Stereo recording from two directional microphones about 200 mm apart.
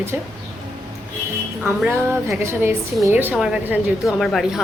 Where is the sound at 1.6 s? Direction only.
10° right (ahead or behind).